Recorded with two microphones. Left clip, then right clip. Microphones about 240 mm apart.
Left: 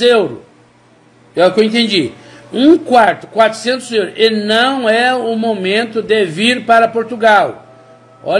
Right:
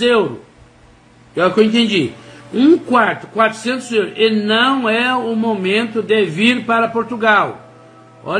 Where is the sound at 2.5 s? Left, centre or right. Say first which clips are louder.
Left 3 dB; centre.